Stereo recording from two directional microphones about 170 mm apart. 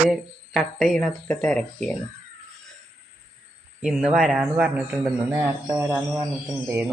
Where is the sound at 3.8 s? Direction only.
5° right (ahead or behind).